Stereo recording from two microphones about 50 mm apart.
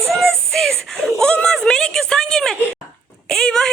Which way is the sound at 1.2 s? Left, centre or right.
Centre.